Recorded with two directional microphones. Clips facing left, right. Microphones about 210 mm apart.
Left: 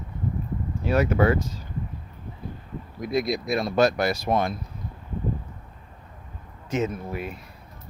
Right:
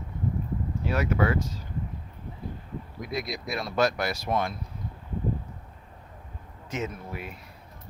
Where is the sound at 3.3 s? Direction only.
25° left (ahead or behind).